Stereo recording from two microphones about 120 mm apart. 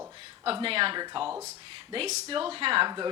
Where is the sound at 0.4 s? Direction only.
50° right (ahead or behind).